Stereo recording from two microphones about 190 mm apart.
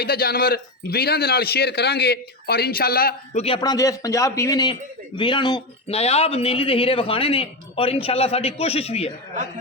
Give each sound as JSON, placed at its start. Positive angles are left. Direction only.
{"t": 0.0, "sound": "speech", "side_deg": 55}
{"t": 3.3, "sound": "a man's voice", "side_deg": 30}
{"t": 3.6, "sound": "a man's voice", "side_deg": 20}